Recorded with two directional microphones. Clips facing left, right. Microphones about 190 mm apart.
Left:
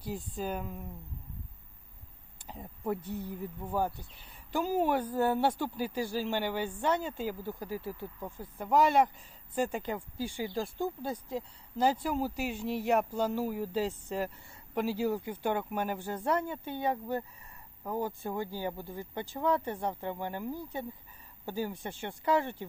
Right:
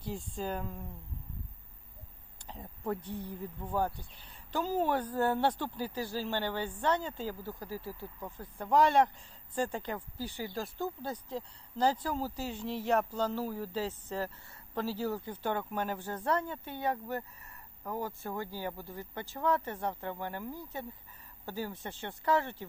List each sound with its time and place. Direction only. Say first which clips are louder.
0.0 s speech: left 1 dB; 5° left (ahead or behind)
2.5 s speech: left 2 dB; 10° left (ahead or behind)